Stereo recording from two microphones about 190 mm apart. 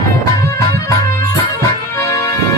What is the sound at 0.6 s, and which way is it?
Music, 15° left (ahead or behind).